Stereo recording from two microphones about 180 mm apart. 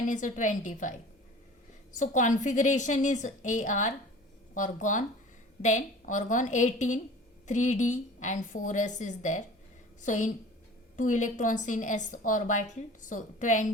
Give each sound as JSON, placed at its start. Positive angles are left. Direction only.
{"t": 0.1, "sound": "a woman's voice", "side_deg": 45}
{"t": 2.0, "sound": "a woman's voice", "side_deg": 45}